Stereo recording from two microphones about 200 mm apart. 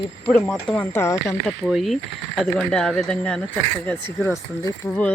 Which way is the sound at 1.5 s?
Centre (ahead or behind).